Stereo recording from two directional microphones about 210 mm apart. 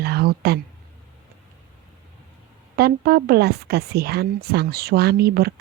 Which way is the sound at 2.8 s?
50° right (ahead or behind).